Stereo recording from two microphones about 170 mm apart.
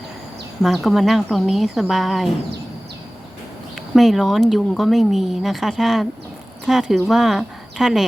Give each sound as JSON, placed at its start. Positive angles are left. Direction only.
{"t": 0.6, "sound": "speech", "side_deg": 0}
{"t": 3.9, "sound": "speech", "side_deg": 0}